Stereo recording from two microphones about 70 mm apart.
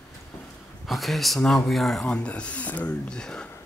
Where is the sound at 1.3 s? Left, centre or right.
Centre.